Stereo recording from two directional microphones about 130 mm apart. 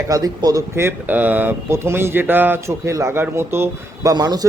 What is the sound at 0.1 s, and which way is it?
A man's voice, 25° right (ahead or behind).